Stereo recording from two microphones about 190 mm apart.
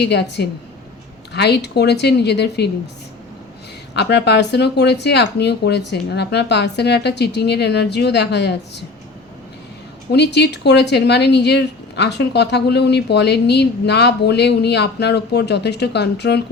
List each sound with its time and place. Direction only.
0.0 s speech: 65° left (ahead or behind)
3.9 s speech: 65° left (ahead or behind)
10.1 s speech: 65° left (ahead or behind)